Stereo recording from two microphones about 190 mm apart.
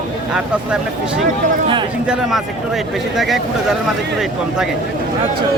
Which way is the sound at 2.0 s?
5° right (ahead or behind).